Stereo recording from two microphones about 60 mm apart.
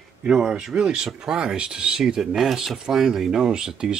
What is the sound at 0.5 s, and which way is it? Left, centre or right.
Speech, centre.